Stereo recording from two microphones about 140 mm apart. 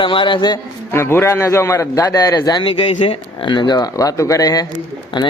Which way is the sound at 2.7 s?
40° left (ahead or behind).